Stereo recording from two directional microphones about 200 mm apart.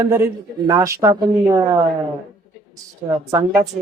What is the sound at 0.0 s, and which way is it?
Speech, 15° right (ahead or behind).